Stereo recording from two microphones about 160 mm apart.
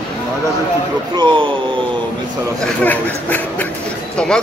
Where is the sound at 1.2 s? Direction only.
30° right (ahead or behind).